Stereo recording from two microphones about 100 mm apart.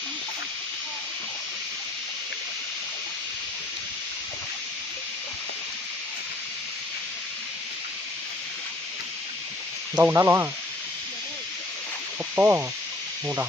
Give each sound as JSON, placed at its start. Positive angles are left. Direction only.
{"t": 9.9, "sound": "speech", "side_deg": -25}
{"t": 12.4, "sound": "speech", "side_deg": -25}